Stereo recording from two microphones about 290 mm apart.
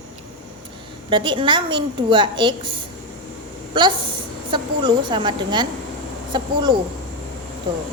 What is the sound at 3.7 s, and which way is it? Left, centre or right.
A woman's voice, centre.